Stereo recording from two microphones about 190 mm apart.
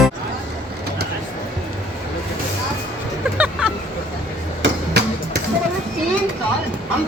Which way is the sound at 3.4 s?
5° right (ahead or behind).